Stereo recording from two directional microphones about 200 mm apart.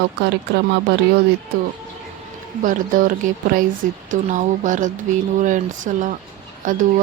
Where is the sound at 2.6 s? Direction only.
40° right (ahead or behind).